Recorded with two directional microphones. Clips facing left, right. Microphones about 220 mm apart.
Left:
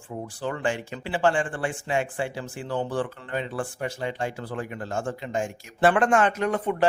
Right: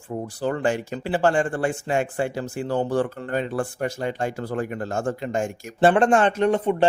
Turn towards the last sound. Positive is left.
turn(degrees=-30)  # may be behind; listen again after turning